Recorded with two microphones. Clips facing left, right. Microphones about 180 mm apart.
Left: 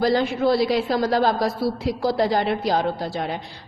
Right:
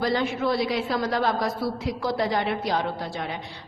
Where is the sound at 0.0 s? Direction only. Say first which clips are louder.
Left 5 dB; 35° left (ahead or behind).